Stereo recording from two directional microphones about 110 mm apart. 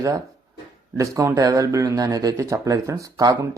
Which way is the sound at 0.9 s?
30° right (ahead or behind).